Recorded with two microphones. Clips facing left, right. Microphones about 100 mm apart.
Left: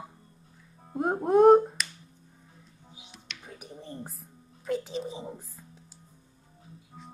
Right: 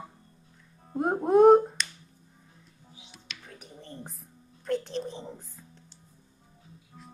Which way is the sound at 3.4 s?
10° left (ahead or behind).